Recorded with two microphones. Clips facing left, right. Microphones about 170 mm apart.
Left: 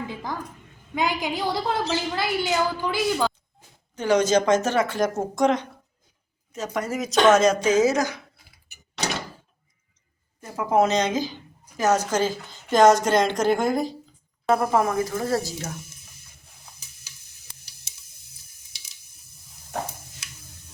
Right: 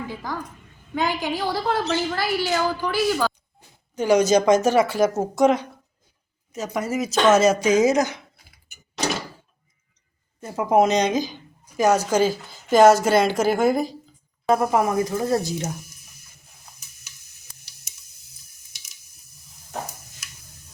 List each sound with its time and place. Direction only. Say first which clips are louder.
0.1 s a sound: right 1 dB; 20° left (ahead or behind)
0.9 s a woman's voice: right 1 dB; 15° left (ahead or behind)
3.9 s a woman's voice: right 2 dB; 10° right (ahead or behind)
10.4 s a woman's voice: right 2 dB; 20° right (ahead or behind)